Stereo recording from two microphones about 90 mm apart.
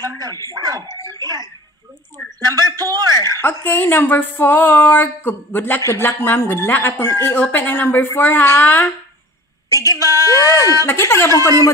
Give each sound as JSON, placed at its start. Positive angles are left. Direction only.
{"t": 0.0, "sound": "speech", "side_deg": -40}
{"t": 3.3, "sound": "speech", "side_deg": 20}
{"t": 9.7, "sound": "speech", "side_deg": 35}
{"t": 9.9, "sound": "speech", "side_deg": -35}
{"t": 10.2, "sound": "speech", "side_deg": 35}